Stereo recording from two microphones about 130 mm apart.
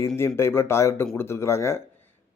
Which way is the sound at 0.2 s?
20° left (ahead or behind).